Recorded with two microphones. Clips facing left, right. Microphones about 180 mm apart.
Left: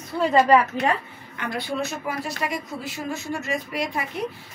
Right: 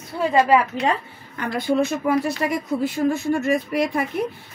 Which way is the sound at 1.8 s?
55° right (ahead or behind).